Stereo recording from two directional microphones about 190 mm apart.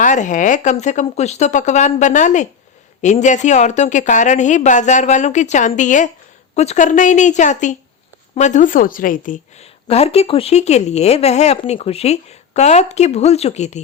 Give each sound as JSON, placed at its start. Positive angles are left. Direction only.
{"t": 0.0, "sound": "a woman's voice", "side_deg": 40}